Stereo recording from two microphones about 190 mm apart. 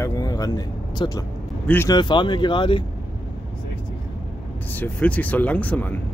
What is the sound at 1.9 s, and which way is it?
Speech, 25° left (ahead or behind).